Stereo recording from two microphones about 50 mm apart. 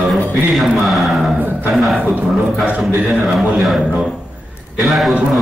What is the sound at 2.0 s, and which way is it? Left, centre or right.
Speech, right.